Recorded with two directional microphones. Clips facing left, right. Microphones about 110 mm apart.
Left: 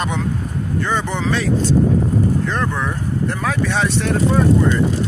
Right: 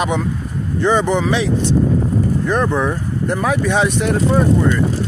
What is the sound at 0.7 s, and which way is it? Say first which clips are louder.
Speech: right 7 dB; 15° right (ahead or behind).